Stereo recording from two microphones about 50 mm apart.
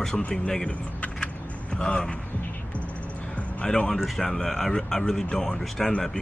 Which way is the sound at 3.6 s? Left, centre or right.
Centre.